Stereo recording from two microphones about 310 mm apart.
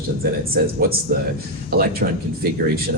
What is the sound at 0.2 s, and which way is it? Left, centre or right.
Speech, right.